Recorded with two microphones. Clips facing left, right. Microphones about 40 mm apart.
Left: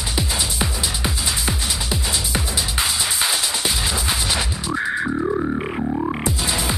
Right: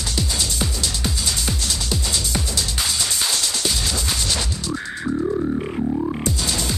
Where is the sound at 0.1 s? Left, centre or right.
Centre.